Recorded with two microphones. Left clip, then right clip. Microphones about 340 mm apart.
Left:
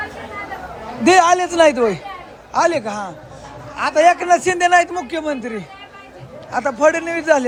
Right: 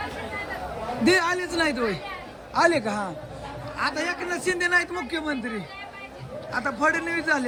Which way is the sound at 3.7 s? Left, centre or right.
Centre.